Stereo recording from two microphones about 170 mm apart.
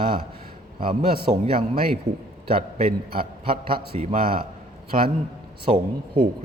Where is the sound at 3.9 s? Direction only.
35° right (ahead or behind).